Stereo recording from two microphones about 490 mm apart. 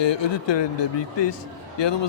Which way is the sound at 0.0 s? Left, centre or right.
Left.